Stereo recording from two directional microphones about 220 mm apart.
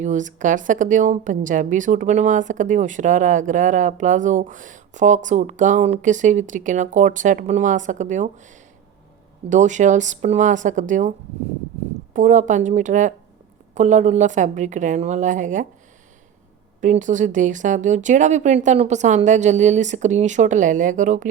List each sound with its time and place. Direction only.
0.0 s a woman's voice: 35° right (ahead or behind)
9.5 s a woman's voice: 35° right (ahead or behind)
12.1 s a woman's voice: 35° right (ahead or behind)
16.8 s a woman's voice: 35° right (ahead or behind)